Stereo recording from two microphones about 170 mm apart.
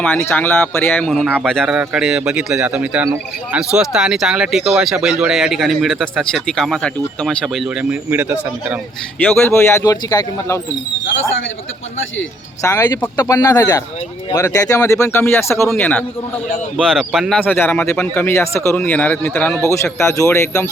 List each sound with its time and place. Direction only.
0.0 s speech: 10° left (ahead or behind); by 8.8 s 10° right (ahead or behind)
9.5 s speech: 15° left (ahead or behind)
11.0 s speech: 90° left
12.6 s speech: 20° left (ahead or behind)